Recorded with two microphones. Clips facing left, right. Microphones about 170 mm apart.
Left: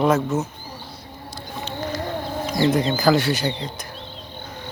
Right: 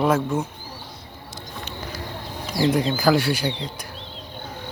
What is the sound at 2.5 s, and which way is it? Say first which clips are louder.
Speech: left 1 dB; 10° right (ahead or behind).